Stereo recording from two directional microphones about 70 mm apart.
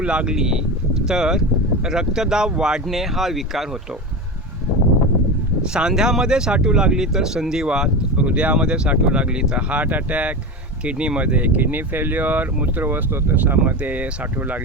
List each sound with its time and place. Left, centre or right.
0.0 s speech: centre
5.7 s speech: centre